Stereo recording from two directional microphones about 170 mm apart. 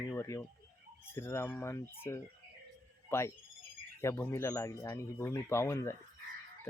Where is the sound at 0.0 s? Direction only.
20° left (ahead or behind).